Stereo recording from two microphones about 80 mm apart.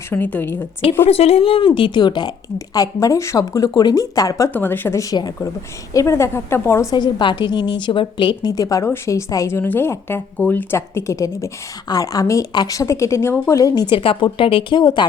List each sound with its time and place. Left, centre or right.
0.1 s a woman's voice: left
1.6 s a woman's voice: left
2.7 s speech: left
4.5 s a woman's voice: left
5.9 s a woman's voice: left
6.9 s a woman's voice: left
8.8 s a woman's voice: left
10.8 s a woman's voice: left
11.9 s a woman's voice: left
13.5 s speech: left
13.9 s speech: left